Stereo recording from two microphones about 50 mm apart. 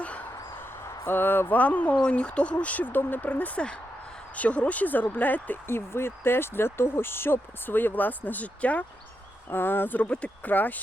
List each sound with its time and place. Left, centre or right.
1.0 s speech: left
1.5 s speech: left
5.6 s speech: left
9.5 s speech: left
10.0 s speech: left
10.4 s speech: left